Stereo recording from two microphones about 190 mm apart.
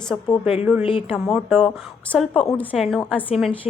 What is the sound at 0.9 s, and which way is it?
Speech, 30° left (ahead or behind).